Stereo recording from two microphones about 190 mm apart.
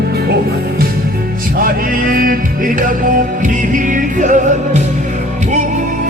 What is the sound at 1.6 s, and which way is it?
Music, 50° right (ahead or behind).